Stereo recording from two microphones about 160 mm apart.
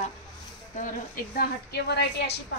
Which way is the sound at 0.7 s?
60° left (ahead or behind).